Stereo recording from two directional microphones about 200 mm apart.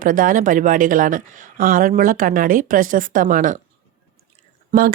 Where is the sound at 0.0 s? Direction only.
45° right (ahead or behind).